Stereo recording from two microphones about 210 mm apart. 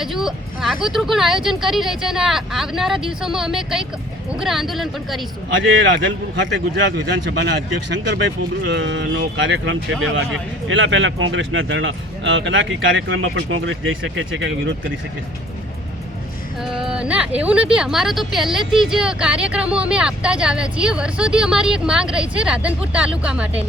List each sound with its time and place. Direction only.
0.0 s speech: centre (ahead or behind)
5.5 s a man's voice: 65° right (ahead or behind)
16.6 s speech: 5° right (ahead or behind)